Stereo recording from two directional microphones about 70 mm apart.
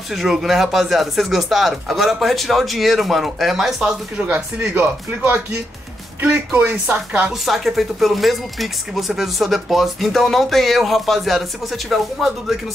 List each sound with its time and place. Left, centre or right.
0.1 s speech: centre
4.2 s speech: centre
7.4 s speech: centre